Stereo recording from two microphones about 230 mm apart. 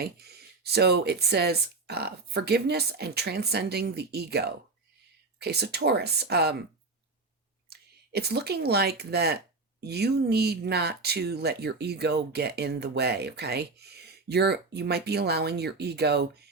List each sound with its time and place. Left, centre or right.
0.0 s speech: right
7.7 s speech: right